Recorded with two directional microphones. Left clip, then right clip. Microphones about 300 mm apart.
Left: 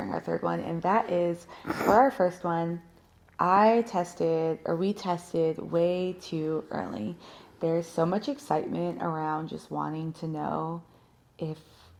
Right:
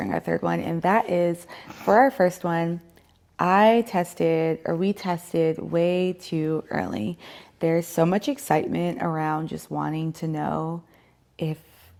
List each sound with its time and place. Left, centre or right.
0.0 s speech: right